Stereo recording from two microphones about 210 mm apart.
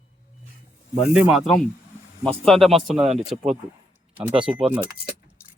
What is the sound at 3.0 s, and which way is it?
Speech, 30° right (ahead or behind).